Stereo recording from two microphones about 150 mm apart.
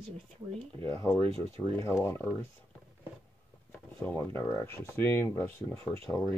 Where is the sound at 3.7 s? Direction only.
10° left (ahead or behind).